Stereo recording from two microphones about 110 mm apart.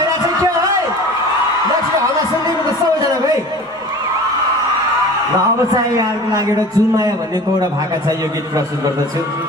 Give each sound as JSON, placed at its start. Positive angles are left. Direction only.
{"t": 5.7, "sound": "a man's voice", "side_deg": -30}